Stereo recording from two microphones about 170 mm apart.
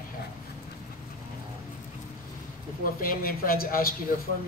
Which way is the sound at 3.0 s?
60° left (ahead or behind).